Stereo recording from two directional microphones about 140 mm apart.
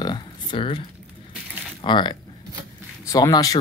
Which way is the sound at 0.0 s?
35° left (ahead or behind).